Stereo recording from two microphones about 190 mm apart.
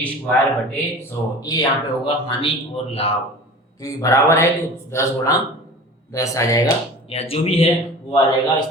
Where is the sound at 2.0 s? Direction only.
30° left (ahead or behind).